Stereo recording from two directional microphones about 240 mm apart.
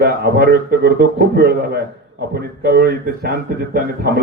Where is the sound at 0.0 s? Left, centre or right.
Right.